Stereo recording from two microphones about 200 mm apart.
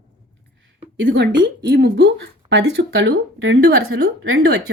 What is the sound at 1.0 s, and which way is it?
A woman's voice, 60° right (ahead or behind).